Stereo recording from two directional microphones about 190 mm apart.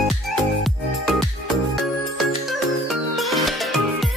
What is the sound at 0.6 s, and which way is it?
Music, centre (ahead or behind).